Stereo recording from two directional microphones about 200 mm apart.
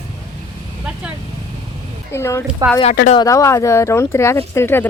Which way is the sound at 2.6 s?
15° right (ahead or behind).